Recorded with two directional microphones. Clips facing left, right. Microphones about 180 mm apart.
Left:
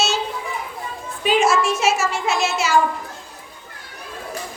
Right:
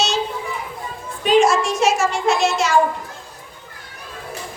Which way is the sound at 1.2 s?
5° left (ahead or behind).